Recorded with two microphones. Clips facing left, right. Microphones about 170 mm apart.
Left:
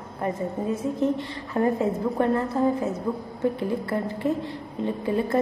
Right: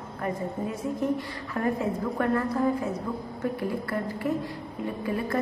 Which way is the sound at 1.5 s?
30° left (ahead or behind).